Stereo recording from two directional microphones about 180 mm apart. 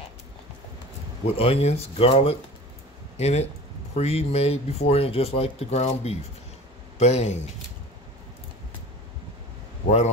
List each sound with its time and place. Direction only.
1.2 s speech: 35° left (ahead or behind)
9.8 s speech: 40° left (ahead or behind)